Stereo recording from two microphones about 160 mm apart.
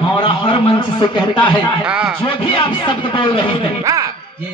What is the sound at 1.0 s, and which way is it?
A man's voice, 30° left (ahead or behind).